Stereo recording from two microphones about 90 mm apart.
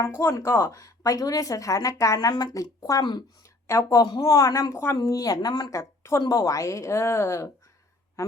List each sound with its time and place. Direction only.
0.1 s speech: 25° left (ahead or behind); by 3.2 s 55° left (ahead or behind)
3.7 s speech: 35° left (ahead or behind)
4.0 s speech: 60° left (ahead or behind)
4.4 s speech: 45° left (ahead or behind)
5.7 s a woman's voice: 35° left (ahead or behind)